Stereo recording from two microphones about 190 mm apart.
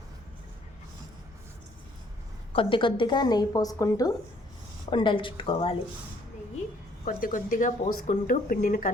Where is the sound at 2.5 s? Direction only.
25° left (ahead or behind).